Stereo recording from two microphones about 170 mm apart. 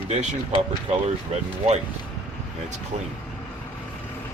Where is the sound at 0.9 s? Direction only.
40° right (ahead or behind).